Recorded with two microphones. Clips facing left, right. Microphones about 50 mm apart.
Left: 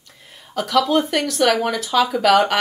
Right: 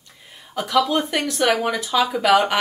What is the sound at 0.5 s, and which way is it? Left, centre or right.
Speech, centre.